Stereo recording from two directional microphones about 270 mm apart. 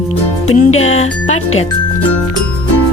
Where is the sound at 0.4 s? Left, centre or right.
Left.